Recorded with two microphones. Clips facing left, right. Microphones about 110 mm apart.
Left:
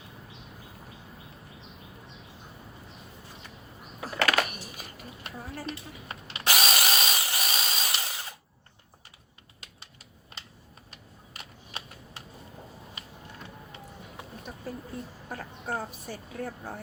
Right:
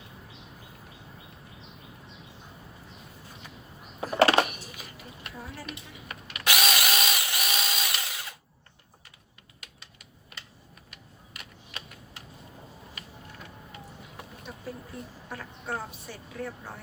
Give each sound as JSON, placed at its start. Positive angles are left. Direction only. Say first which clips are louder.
{"t": 4.2, "sound": "a sound", "louder": "right 5 dB", "side_deg": -30}
{"t": 4.4, "sound": "a sound", "louder": "even", "side_deg": 45}
{"t": 6.1, "sound": "drill", "louder": "even", "side_deg": 30}
{"t": 10.3, "sound": "typing", "louder": "even", "side_deg": 30}
{"t": 11.3, "sound": "shuffling cards", "louder": "left 1 dB", "side_deg": 35}
{"t": 15.3, "sound": "vehicle", "louder": "left 1 dB", "side_deg": 45}